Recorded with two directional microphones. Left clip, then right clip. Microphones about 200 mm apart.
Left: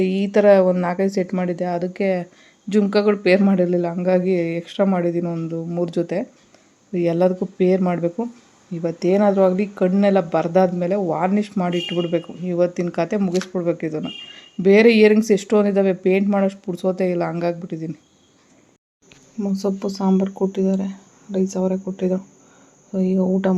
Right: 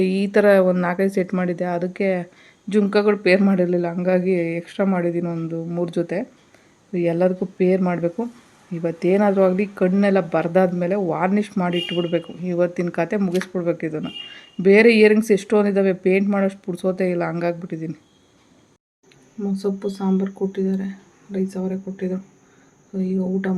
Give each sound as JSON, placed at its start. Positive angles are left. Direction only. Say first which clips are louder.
{"t": 0.0, "sound": "speech", "louder": "left 1 dB", "side_deg": 0}
{"t": 19.4, "sound": "speech", "louder": "left 1 dB", "side_deg": 20}